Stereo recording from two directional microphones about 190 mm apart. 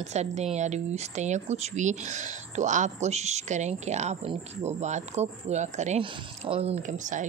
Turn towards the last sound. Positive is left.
turn(degrees=-40)  # may be behind; listen again after turning